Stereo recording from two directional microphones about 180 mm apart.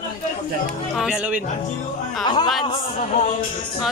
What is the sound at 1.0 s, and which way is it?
Speech, 5° right (ahead or behind).